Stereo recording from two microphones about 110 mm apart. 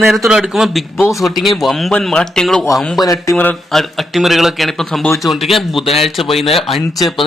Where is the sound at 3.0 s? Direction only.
30° left (ahead or behind).